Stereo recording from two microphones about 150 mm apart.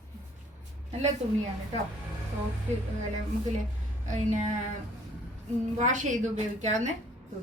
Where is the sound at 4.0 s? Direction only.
55° right (ahead or behind).